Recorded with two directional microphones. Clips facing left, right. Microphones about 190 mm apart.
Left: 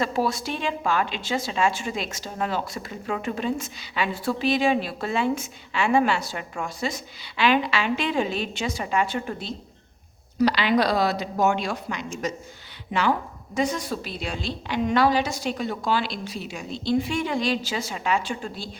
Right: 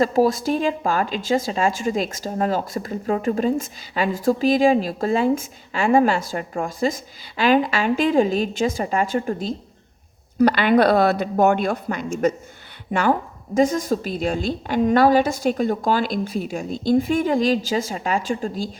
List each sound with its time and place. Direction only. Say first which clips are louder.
0.0 s speech: right 7 dB; 40° right (ahead or behind)
6.7 s a woman's voice: right 7 dB; 50° right (ahead or behind)
10.3 s a woman's voice: right 5 dB; 55° right (ahead or behind)